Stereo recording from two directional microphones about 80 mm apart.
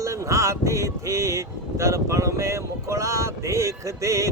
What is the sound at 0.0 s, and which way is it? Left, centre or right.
Speech, right.